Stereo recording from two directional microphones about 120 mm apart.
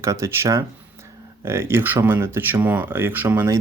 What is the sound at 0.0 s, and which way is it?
Speech, 25° right (ahead or behind).